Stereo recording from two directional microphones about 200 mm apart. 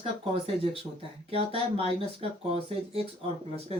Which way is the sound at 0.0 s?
30° right (ahead or behind).